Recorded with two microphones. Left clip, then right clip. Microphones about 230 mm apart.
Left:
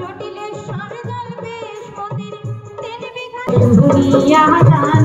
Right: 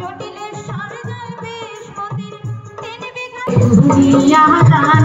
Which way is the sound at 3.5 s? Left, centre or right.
Right.